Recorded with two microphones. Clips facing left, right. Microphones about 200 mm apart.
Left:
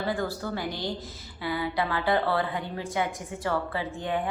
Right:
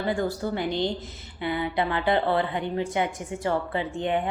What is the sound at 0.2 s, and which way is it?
A woman's voice, 20° right (ahead or behind).